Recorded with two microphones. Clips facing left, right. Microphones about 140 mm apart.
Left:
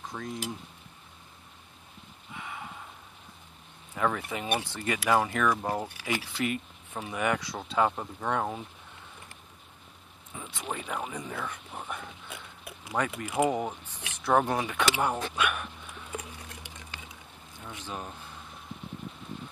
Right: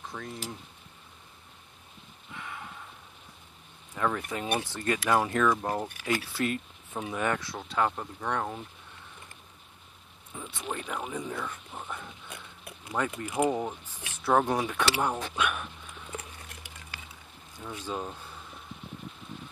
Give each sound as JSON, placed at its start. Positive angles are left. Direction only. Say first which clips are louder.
{"t": 0.1, "sound": "speech", "louder": "left 2 dB", "side_deg": 5}
{"t": 2.3, "sound": "horse", "louder": "left 1 dB", "side_deg": 15}
{"t": 3.9, "sound": "speech", "louder": "left 1 dB", "side_deg": 0}
{"t": 10.3, "sound": "a sound", "louder": "right 1 dB", "side_deg": 0}
{"t": 10.7, "sound": "speech", "louder": "even", "side_deg": 5}
{"t": 14.2, "sound": "speech", "louder": "even", "side_deg": 0}
{"t": 16.2, "sound": "a sound", "louder": "left 3 dB", "side_deg": 20}
{"t": 17.6, "sound": "speech", "louder": "right 4 dB", "side_deg": -10}